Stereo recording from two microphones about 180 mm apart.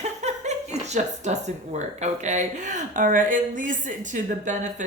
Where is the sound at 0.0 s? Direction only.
40° right (ahead or behind).